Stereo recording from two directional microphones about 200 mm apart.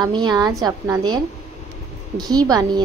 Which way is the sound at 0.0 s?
20° right (ahead or behind).